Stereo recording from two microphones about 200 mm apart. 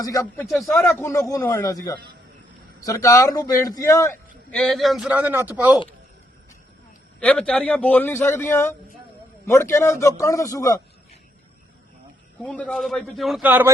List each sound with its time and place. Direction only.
0.0 s a man's voice: 15° left (ahead or behind)
0.5 s a man's voice: 5° left (ahead or behind)
7.2 s a man's voice: 5° left (ahead or behind)
12.4 s a man's voice: 5° left (ahead or behind); by 13.7 s 10° right (ahead or behind)